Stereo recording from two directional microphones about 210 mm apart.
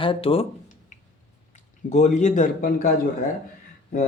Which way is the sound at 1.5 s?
35° left (ahead or behind).